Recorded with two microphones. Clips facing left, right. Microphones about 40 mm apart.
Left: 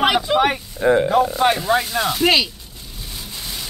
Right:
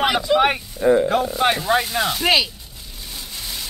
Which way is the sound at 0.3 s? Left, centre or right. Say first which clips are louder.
Right 3 dB; left.